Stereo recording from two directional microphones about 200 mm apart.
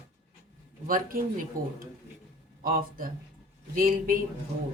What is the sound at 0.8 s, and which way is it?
A woman's voice, 45° right (ahead or behind).